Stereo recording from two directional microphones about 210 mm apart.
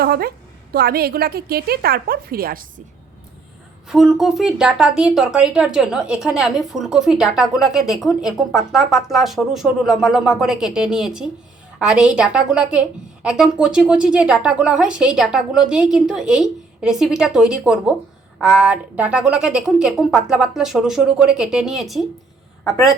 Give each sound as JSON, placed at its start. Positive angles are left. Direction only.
{"t": 0.0, "sound": "a woman's voice", "side_deg": -45}
{"t": 3.8, "sound": "a woman's voice", "side_deg": 0}